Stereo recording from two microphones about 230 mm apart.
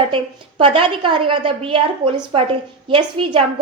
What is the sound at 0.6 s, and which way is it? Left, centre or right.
A woman's voice, right.